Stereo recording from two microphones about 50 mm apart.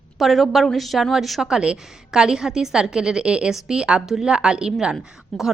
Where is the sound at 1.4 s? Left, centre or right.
Centre.